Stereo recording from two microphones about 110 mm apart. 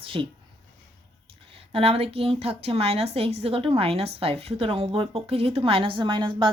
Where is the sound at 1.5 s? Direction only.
60° right (ahead or behind).